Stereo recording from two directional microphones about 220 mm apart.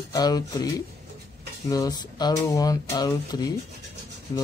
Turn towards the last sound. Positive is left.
turn(degrees=15)  # may be behind; listen again after turning